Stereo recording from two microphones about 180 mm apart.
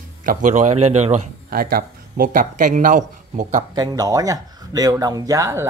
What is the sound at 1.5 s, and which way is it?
Speech, 55° right (ahead or behind).